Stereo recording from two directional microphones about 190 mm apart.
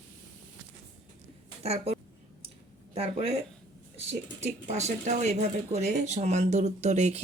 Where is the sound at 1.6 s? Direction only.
35° right (ahead or behind).